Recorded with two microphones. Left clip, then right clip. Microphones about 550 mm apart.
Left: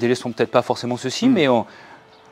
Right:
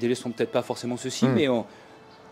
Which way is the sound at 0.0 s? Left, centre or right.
Left.